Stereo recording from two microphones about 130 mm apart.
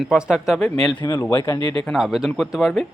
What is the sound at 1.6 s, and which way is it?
Speech, 45° right (ahead or behind).